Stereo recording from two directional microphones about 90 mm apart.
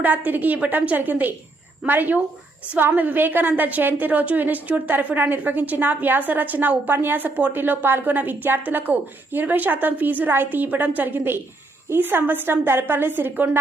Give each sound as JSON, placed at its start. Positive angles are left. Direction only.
{"t": 0.3, "sound": "a woman's voice", "side_deg": -20}